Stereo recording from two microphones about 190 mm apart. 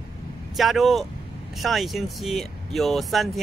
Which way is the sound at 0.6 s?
Centre (ahead or behind).